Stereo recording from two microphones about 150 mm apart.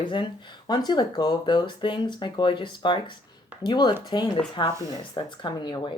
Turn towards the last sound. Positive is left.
turn(degrees=30)  # may be behind; listen again after turning